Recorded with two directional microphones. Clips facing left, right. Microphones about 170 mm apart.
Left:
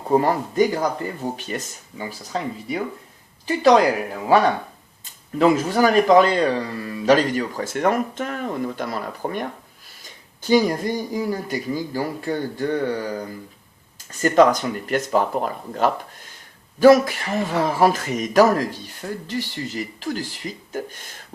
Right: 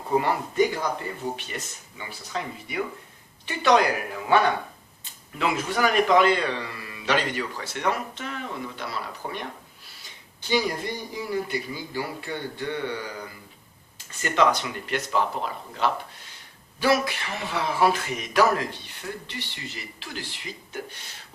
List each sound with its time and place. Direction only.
0.2 s a man's voice: 40° left (ahead or behind)
5.4 s a man's voice: 40° left (ahead or behind)